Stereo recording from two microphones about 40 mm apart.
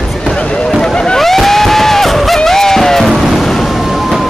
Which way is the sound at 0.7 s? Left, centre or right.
Centre.